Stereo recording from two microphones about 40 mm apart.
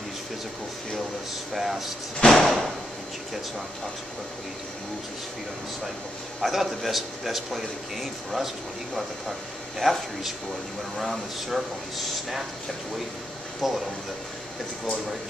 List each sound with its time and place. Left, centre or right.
1.5 s speech: centre
2.1 s slam: centre
2.4 s a man's voice: centre
6.4 s a man's voice: centre
9.8 s a man's voice: centre
13.6 s a man's voice: centre